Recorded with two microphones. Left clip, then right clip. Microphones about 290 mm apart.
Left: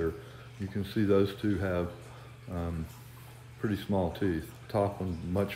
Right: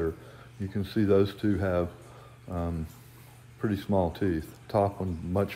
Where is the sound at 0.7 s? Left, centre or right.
Centre.